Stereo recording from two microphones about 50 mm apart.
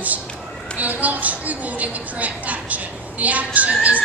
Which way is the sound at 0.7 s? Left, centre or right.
Right.